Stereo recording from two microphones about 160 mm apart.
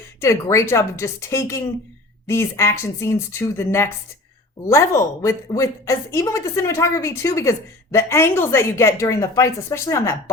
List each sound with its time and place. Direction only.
0.2 s a woman's voice: 20° left (ahead or behind)